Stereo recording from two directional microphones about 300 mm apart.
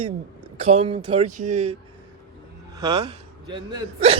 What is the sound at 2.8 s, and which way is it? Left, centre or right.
A man's voice, centre.